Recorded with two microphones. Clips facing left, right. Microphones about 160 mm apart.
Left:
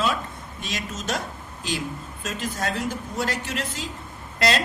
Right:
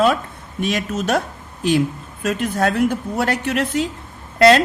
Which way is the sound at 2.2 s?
60° right (ahead or behind).